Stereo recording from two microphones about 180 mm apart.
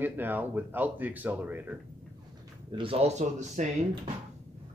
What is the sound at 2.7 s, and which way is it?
Speech, 30° right (ahead or behind).